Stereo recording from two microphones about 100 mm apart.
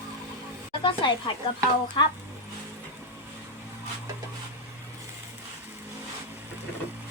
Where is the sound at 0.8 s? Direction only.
60° left (ahead or behind).